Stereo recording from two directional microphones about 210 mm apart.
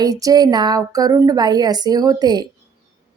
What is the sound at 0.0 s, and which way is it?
A woman's voice, 15° right (ahead or behind).